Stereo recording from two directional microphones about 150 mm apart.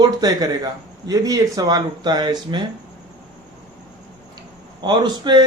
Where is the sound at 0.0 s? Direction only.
25° right (ahead or behind).